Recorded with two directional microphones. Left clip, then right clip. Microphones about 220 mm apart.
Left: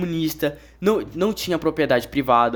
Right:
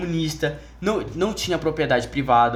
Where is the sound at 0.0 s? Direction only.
50° left (ahead or behind).